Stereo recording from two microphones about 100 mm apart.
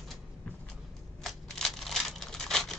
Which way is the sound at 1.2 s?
Centre (ahead or behind).